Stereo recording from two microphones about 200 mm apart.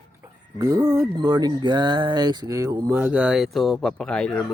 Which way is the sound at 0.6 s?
15° right (ahead or behind).